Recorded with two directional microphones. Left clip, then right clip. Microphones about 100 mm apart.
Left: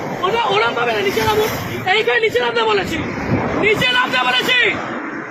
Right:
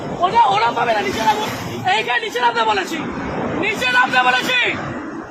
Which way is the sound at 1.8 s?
35° right (ahead or behind).